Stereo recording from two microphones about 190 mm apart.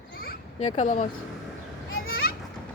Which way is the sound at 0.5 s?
35° left (ahead or behind).